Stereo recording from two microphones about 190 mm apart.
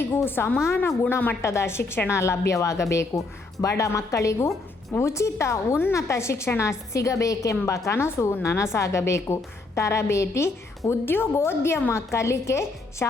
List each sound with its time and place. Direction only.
0.0 s a woman's voice: 10° left (ahead or behind)